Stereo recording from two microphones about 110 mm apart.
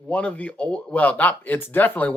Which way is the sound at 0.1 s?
10° left (ahead or behind).